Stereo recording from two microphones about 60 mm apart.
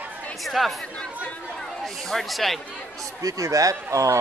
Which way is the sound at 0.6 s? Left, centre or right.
Centre.